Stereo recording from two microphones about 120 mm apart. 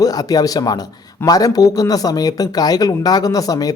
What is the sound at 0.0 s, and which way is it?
A man's voice, 30° left (ahead or behind).